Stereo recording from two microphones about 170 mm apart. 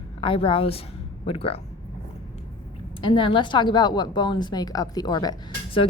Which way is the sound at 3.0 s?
30° left (ahead or behind).